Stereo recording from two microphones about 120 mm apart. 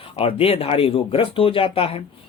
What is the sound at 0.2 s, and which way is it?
Speech, 55° left (ahead or behind).